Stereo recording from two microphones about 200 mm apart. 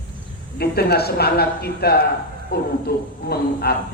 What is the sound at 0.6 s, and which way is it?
Speech, 55° left (ahead or behind).